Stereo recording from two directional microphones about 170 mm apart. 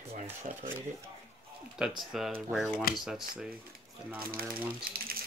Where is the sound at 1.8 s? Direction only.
5° right (ahead or behind).